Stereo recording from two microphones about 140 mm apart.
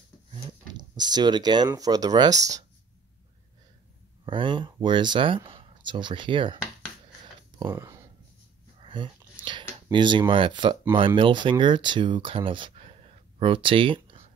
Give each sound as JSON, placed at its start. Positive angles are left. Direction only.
{"t": 0.3, "sound": "a sound", "side_deg": -30}
{"t": 1.8, "sound": "speech", "side_deg": -30}
{"t": 4.3, "sound": "speech", "side_deg": -35}
{"t": 7.7, "sound": "speech", "side_deg": -20}
{"t": 8.8, "sound": "a sound", "side_deg": -35}
{"t": 10.9, "sound": "speech", "side_deg": -35}